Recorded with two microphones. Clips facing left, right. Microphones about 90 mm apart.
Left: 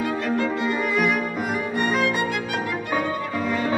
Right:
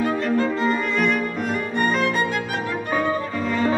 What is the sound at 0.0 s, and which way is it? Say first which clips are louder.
Violin: right 3 dB; 35° right (ahead or behind).